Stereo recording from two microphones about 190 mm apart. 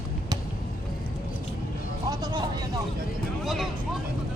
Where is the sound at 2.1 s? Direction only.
20° right (ahead or behind).